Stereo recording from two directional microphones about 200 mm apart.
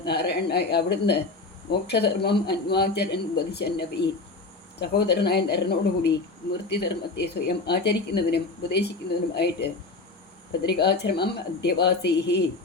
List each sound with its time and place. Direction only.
0.0 s speech: 55° left (ahead or behind)
10.7 s speech: 55° left (ahead or behind)